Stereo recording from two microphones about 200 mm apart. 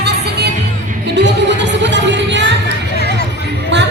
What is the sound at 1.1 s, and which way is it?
Music, 60° right (ahead or behind).